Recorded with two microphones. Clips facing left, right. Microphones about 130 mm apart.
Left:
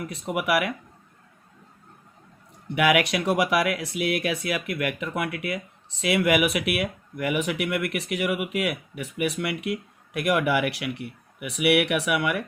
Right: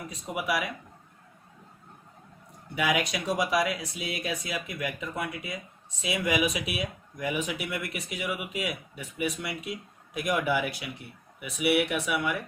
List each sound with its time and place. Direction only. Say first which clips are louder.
0.1 s speech: left 5 dB; 65° left (ahead or behind)
2.7 s speech: left 6 dB; 65° left (ahead or behind)